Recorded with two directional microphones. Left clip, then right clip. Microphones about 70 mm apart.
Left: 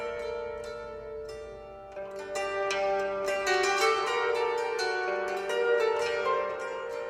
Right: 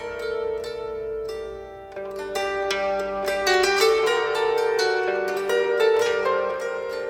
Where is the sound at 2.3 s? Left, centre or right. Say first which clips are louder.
Right 6 dB; left.